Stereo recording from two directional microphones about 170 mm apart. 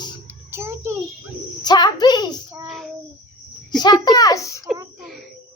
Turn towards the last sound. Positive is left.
turn(degrees=20)  # may be behind; listen again after turning